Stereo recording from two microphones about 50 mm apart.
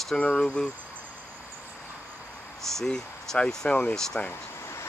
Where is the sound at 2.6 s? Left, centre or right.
Centre.